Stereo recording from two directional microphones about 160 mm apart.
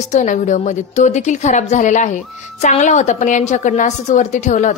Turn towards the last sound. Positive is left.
turn(degrees=50)  # may be behind; listen again after turning